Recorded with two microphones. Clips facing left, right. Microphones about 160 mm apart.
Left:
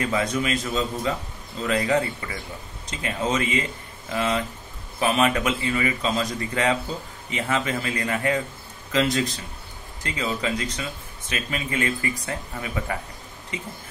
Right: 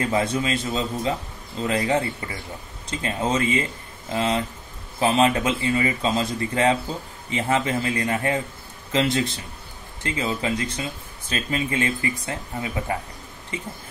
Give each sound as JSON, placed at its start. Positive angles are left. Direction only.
{"t": 0.0, "sound": "speech", "side_deg": -30}